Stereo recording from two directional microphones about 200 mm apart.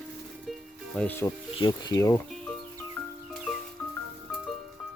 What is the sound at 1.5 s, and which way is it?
Speech, 20° left (ahead or behind).